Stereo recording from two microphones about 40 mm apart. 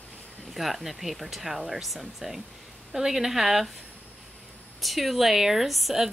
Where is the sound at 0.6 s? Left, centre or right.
Centre.